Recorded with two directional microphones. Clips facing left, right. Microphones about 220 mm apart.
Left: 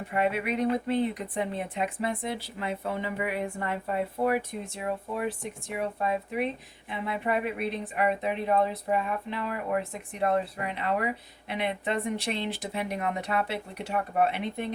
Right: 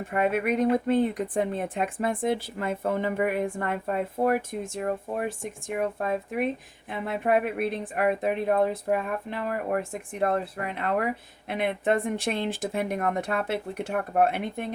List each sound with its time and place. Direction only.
0.1 s speech: 50° right (ahead or behind)